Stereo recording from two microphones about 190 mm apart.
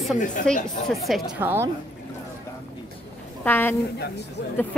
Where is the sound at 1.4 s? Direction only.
10° right (ahead or behind).